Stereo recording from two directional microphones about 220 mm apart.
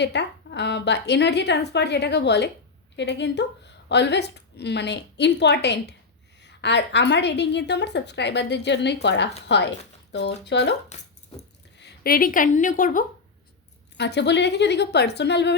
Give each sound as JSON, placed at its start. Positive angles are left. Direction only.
{"t": 0.0, "sound": "a woman's voice", "side_deg": 50}
{"t": 11.8, "sound": "a woman's voice", "side_deg": 45}
{"t": 13.9, "sound": "a woman's voice", "side_deg": 50}